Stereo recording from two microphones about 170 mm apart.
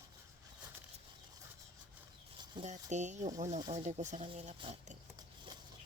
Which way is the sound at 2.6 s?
45° right (ahead or behind).